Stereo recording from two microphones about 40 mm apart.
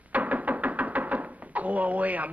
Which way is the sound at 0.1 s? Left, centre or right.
Right.